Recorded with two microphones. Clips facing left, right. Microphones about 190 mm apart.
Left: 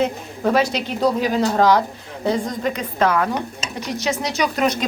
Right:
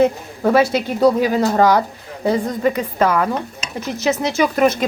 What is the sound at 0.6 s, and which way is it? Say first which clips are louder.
Speech: right 4 dB; 50° right (ahead or behind).